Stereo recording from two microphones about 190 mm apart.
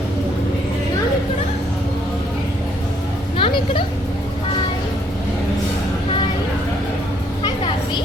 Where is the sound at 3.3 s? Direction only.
25° left (ahead or behind).